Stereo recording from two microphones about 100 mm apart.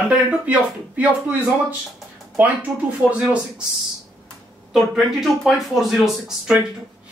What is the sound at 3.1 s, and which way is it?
Speech, 15° right (ahead or behind).